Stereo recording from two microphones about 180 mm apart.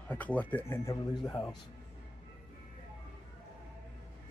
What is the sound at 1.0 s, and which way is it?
Speech, 25° left (ahead or behind).